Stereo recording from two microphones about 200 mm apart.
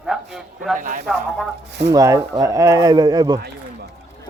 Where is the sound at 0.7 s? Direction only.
40° right (ahead or behind).